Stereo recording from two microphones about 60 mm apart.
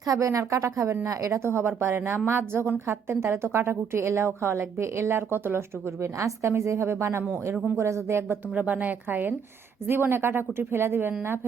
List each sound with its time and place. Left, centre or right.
0.0 s a woman's voice: right
1.0 s a woman's voice: right
1.4 s a woman's voice: right
8.5 s a woman's voice: right